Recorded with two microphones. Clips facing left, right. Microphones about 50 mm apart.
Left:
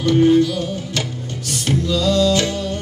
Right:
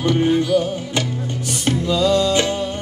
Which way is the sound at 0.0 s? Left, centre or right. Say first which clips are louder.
Left 4 dB; centre.